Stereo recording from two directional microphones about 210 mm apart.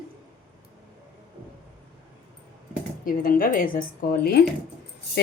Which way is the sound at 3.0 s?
45° left (ahead or behind).